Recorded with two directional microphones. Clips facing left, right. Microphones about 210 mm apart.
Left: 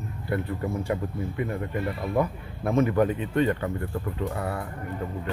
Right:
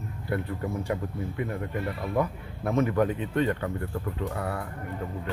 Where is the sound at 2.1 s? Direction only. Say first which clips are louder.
Left 1 dB; 25° left (ahead or behind).